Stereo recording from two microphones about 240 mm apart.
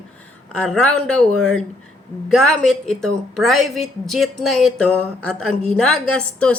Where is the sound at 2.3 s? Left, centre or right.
Centre.